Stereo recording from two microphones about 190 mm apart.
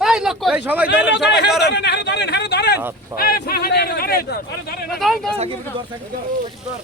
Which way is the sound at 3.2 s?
55° left (ahead or behind).